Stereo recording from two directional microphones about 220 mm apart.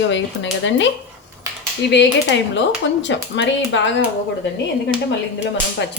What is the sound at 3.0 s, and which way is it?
Speech, 55° left (ahead or behind).